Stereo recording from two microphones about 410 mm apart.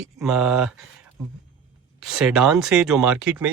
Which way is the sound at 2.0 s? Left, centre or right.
Centre.